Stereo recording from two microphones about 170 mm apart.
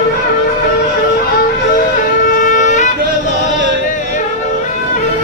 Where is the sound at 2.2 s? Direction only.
50° left (ahead or behind).